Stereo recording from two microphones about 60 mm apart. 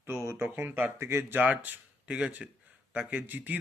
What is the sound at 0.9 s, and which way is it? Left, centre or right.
Speech, right.